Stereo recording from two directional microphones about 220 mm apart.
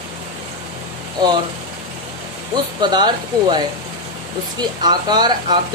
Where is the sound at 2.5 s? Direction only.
20° right (ahead or behind).